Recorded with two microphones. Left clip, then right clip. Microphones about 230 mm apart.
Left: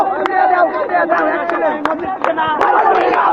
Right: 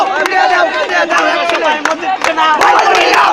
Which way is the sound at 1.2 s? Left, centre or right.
Right.